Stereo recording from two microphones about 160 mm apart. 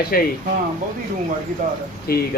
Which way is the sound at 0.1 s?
65° left (ahead or behind).